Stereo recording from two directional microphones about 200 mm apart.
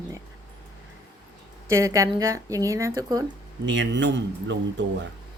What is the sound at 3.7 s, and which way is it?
Speech, 65° right (ahead or behind).